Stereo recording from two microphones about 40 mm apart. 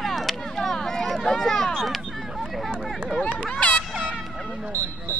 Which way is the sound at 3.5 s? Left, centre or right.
Left.